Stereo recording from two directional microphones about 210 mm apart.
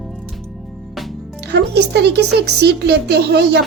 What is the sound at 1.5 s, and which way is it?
A woman's voice, 55° right (ahead or behind).